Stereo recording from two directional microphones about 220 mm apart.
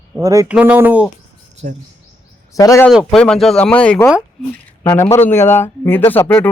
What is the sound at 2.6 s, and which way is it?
Speech, 15° left (ahead or behind).